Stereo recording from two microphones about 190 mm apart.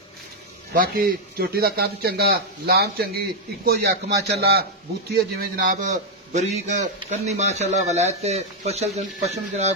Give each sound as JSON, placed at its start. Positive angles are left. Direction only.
{"t": 0.7, "sound": "a man's voice", "side_deg": -50}